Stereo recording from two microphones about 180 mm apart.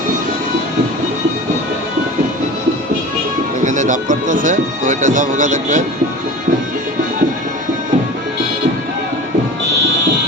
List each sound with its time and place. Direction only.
3.6 s speech: 45° right (ahead or behind)